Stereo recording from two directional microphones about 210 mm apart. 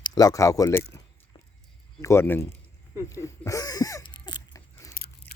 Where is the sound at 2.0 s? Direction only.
10° left (ahead or behind).